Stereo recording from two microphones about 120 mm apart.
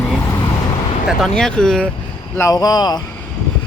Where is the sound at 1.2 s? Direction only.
5° left (ahead or behind).